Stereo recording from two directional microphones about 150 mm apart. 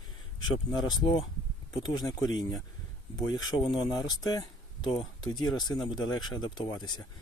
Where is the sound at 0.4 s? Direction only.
30° left (ahead or behind).